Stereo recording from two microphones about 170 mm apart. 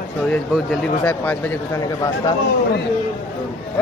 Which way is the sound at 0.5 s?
10° left (ahead or behind).